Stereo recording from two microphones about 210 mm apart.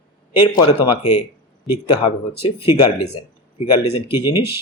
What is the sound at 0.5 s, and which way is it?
Speech, 25° left (ahead or behind).